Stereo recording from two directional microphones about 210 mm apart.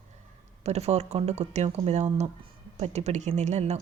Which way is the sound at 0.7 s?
30° right (ahead or behind).